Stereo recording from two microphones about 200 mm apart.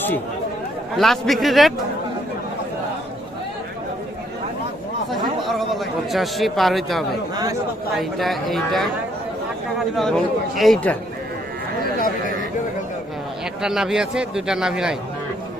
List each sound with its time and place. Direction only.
0.9 s a man's voice: centre (ahead or behind)
5.4 s a man's voice: centre (ahead or behind)
11.9 s speech: 45° left (ahead or behind)
13.6 s a man's voice: 5° right (ahead or behind)